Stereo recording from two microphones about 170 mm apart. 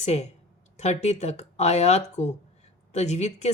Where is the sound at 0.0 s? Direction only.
40° left (ahead or behind).